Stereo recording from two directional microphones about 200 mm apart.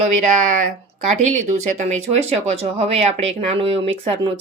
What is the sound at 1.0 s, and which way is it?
Speech, 35° right (ahead or behind).